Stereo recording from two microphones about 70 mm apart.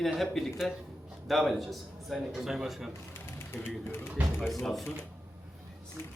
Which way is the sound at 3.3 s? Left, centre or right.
Left.